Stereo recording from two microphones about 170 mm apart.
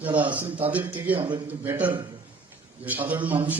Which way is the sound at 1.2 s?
30° right (ahead or behind).